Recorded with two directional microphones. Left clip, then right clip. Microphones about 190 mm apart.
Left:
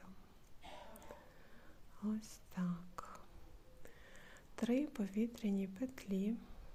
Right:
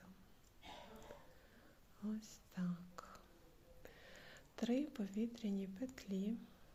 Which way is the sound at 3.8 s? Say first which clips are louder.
Right 1 dB; centre (ahead or behind).